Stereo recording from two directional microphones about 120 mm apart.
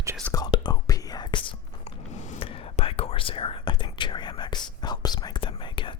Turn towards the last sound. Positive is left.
turn(degrees=45)  # may be behind; listen again after turning